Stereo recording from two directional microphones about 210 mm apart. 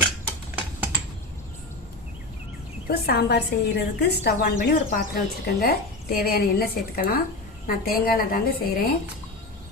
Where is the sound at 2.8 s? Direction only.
50° left (ahead or behind).